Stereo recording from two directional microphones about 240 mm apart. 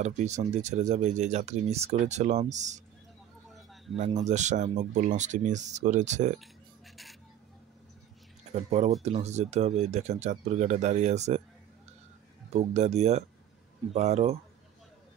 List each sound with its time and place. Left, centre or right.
0.0 s speech: right
3.9 s speech: right
8.5 s speech: right
12.5 s speech: right